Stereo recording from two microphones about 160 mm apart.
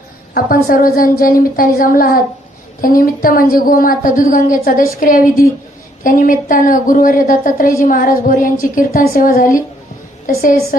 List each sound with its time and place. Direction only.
0.3 s a woman's voice: 65° left (ahead or behind)